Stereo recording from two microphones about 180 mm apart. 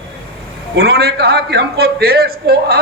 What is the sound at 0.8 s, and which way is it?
A man's voice, 60° right (ahead or behind).